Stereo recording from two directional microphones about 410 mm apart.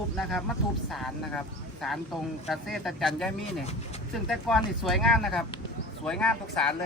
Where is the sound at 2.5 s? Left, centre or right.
Centre.